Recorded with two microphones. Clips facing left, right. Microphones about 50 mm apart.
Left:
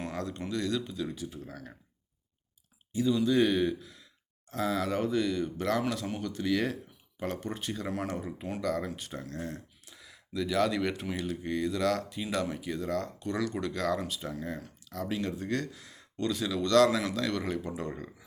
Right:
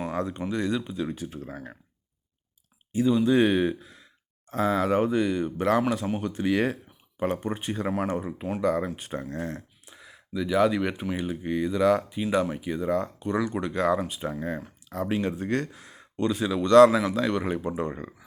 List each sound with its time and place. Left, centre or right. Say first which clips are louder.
0.1 s speech: right 6 dB; right
1.0 s speech: right 4 dB; right
2.9 s speech: right 5 dB; right
8.0 s speech: right 6 dB; right
9.8 s a sound: right 4 dB; right
11.1 s speech: right 4 dB; centre
16.9 s speech: right 6 dB; centre
17.2 s speech: right 5 dB; right